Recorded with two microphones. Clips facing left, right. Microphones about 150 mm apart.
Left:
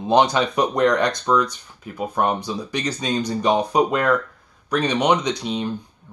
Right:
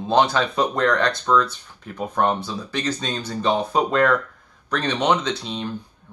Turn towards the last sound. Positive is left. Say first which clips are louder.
# left 3 dB
turn(degrees=15)  # may be behind; listen again after turning